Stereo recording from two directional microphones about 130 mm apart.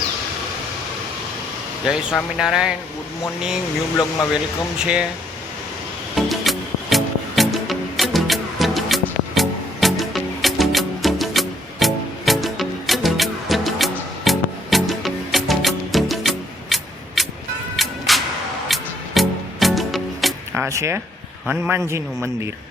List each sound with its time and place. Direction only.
1.8 s speech: 5° right (ahead or behind)
4.8 s speech: 10° right (ahead or behind)
6.1 s music: centre (ahead or behind)
20.5 s a man's voice: 20° right (ahead or behind)